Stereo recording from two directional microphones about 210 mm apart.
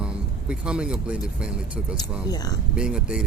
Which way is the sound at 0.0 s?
5° right (ahead or behind).